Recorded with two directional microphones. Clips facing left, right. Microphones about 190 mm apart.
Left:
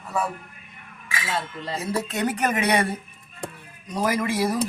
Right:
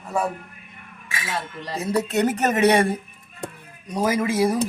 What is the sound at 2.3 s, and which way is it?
Speech, 40° right (ahead or behind).